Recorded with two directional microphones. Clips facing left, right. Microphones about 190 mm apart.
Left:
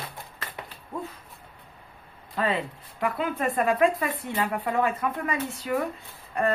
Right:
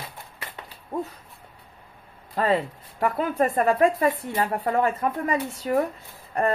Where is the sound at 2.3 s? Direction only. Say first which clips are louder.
Right 4 dB; 40° right (ahead or behind).